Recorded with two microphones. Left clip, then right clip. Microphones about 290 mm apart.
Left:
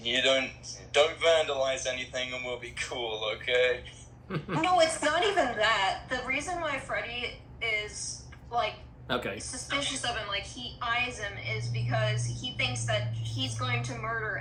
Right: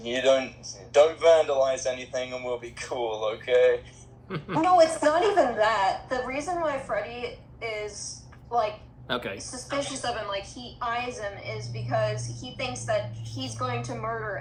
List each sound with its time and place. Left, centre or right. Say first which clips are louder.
0.0 s a woman's voice: right 3 dB; centre
4.3 s a man's voice: right 4 dB; centre
4.6 s a woman's voice: right 5 dB; centre
9.0 s a man's voice: right 1 dB; centre
9.5 s a woman's voice: right 1 dB; centre